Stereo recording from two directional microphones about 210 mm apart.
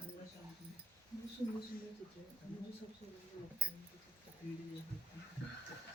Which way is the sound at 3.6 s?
5° right (ahead or behind).